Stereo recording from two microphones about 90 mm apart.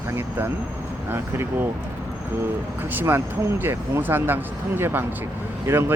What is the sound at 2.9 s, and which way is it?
Speech, 25° right (ahead or behind).